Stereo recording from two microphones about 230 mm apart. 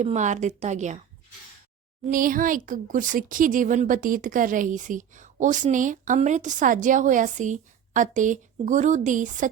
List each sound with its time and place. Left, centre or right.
0.0 s speech: right
2.0 s speech: right